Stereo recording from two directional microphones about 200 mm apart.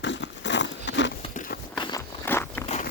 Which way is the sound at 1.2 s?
35° left (ahead or behind).